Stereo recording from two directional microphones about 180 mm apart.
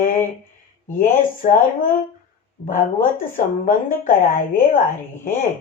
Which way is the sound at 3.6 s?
50° left (ahead or behind).